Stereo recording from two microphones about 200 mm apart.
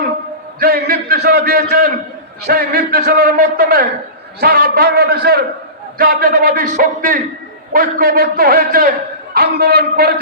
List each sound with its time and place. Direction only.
0.6 s speech: 50° right (ahead or behind)